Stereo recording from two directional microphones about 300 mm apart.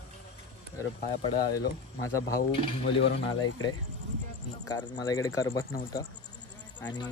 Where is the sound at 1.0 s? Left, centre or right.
Centre.